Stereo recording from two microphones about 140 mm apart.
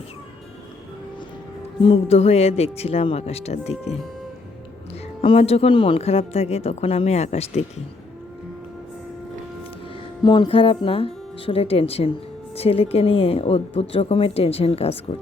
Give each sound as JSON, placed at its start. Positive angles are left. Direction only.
{"t": 1.8, "sound": "a woman's voice", "side_deg": 45}
{"t": 5.2, "sound": "a woman's voice", "side_deg": 40}
{"t": 10.2, "sound": "a woman's voice", "side_deg": 35}